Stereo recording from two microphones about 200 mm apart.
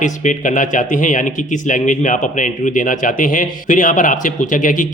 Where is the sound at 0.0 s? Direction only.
40° left (ahead or behind).